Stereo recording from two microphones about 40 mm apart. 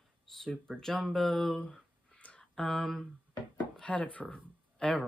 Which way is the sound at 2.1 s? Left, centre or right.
Left.